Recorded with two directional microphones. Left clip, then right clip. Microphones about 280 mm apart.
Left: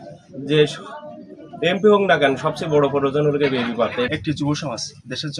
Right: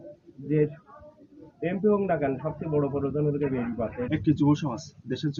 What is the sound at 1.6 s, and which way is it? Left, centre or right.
Speech, left.